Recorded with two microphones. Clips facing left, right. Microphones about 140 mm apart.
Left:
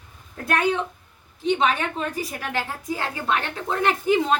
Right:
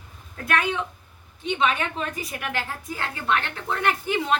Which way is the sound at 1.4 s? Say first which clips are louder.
Left 3 dB; 40° left (ahead or behind).